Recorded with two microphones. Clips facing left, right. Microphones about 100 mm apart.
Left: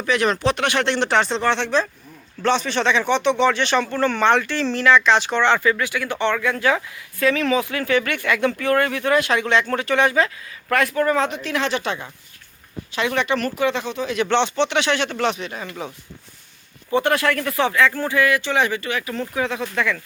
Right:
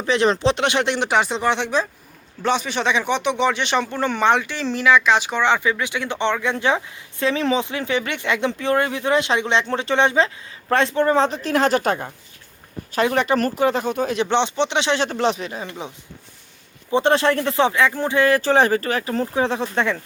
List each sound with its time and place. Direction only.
0.0 s speech: 25° right (ahead or behind); by 14.2 s 45° right (ahead or behind)
14.3 s speech: 15° right (ahead or behind)
16.9 s speech: 25° right (ahead or behind)
18.3 s speech: 35° right (ahead or behind)